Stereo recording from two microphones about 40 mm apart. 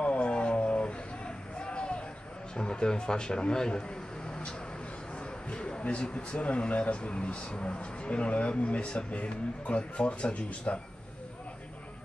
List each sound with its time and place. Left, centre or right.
0.0 s vehicle: left
0.3 s a sound: left
2.5 s speech: left
5.1 s speech: left